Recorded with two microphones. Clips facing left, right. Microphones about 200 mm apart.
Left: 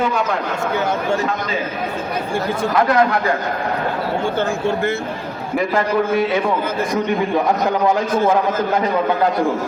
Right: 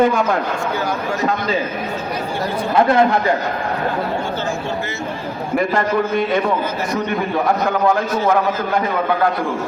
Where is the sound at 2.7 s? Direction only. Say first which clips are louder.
Right 2 dB; 25° right (ahead or behind).